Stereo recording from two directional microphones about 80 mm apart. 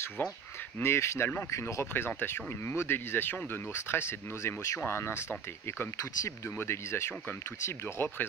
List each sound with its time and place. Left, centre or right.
0.2 s speech: left